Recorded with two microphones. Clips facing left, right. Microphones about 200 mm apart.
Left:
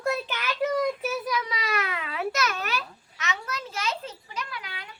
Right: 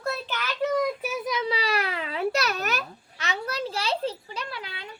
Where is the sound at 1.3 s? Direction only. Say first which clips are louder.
Right 3 dB; 30° right (ahead or behind).